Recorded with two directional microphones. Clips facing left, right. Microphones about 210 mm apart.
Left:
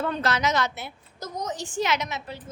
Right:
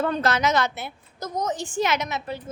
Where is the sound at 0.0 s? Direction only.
50° right (ahead or behind).